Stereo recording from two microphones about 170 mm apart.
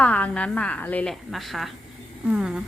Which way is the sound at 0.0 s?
10° left (ahead or behind).